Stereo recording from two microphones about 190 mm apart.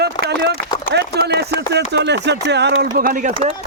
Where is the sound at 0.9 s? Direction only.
60° right (ahead or behind).